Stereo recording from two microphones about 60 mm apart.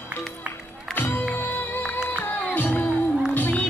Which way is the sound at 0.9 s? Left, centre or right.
Left.